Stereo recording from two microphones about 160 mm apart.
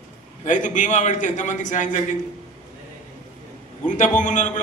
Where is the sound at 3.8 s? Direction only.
50° left (ahead or behind).